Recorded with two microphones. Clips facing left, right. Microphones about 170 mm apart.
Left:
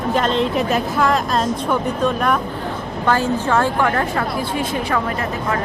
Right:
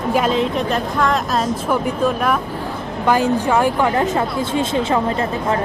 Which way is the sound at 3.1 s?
15° right (ahead or behind).